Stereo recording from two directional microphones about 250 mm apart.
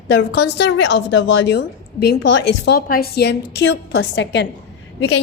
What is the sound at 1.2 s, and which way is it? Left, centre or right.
Speech, left.